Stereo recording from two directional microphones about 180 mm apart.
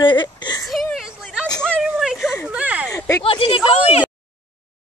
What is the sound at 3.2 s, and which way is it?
Speech, 30° left (ahead or behind).